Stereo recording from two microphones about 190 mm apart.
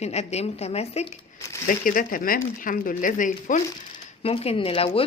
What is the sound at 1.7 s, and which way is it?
Speech, 45° left (ahead or behind).